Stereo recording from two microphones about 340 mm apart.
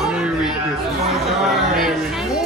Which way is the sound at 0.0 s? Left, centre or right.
Centre.